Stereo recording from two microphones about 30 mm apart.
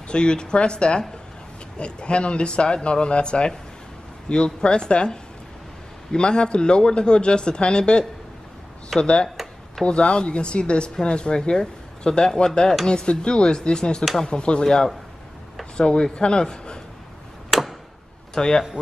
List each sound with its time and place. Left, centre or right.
0.1 s speech: left
4.6 s speech: left
9.0 s speech: left
14.6 s speech: centre
15.8 s speech: left
17.5 s tick-tock: centre
18.3 s a man's voice: left